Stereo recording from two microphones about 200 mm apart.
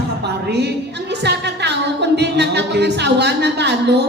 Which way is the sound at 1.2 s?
55° right (ahead or behind).